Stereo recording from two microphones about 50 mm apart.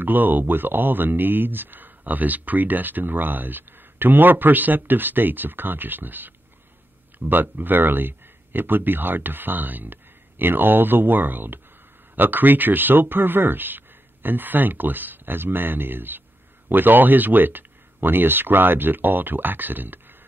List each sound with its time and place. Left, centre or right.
0.0 s speech: right